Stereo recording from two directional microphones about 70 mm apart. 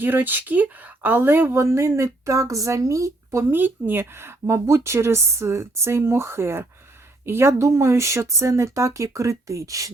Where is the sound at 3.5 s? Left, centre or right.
Right.